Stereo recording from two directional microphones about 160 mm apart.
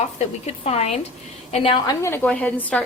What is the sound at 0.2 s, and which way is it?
A woman's voice, 40° left (ahead or behind).